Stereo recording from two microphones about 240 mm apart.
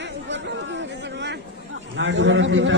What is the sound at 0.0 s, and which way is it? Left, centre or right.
Chatter, right.